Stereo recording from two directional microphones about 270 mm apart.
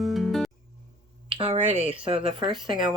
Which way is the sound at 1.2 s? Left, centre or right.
Centre.